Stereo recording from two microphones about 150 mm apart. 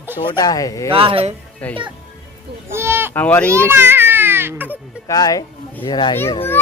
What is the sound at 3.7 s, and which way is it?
Baby cry, 15° right (ahead or behind).